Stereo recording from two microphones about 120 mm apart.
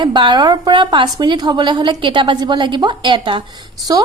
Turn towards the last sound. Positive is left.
turn(degrees=-35)  # may be behind; listen again after turning